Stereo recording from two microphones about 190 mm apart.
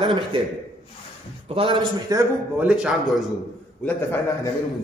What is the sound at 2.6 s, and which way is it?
Speech, 5° right (ahead or behind).